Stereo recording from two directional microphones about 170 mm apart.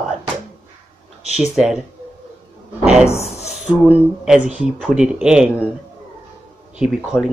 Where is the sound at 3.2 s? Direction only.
40° left (ahead or behind).